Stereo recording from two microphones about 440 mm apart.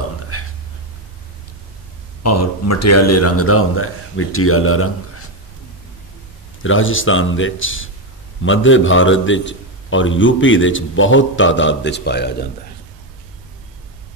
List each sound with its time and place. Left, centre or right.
0.3 s whispering: left
2.2 s a man's voice: left
6.6 s a man's voice: left